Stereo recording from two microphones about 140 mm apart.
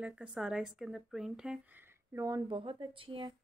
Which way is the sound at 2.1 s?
30° right (ahead or behind).